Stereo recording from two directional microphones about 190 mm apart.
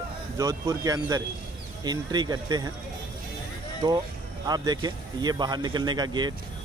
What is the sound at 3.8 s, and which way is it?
Speech, 25° right (ahead or behind).